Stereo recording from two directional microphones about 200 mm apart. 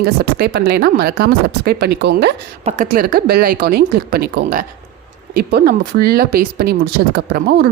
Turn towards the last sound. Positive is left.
turn(degrees=-55)  # may be behind; listen again after turning